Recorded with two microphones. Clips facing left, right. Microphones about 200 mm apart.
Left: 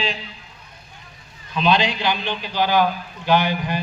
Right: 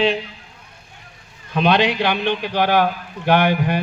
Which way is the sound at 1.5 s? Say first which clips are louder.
Right 3 dB; 60° right (ahead or behind).